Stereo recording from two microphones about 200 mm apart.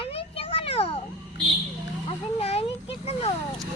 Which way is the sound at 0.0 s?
30° left (ahead or behind).